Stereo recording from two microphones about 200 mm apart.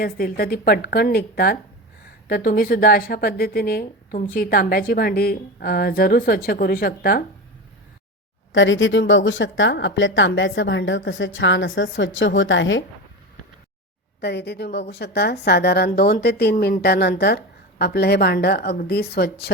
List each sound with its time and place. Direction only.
0.0 s speech: 50° left (ahead or behind)
8.5 s speech: 70° left (ahead or behind)
14.2 s a woman's voice: 55° left (ahead or behind)